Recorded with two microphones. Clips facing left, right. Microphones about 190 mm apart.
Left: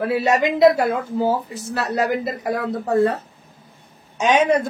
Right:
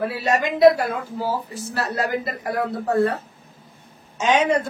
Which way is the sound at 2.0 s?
20° left (ahead or behind).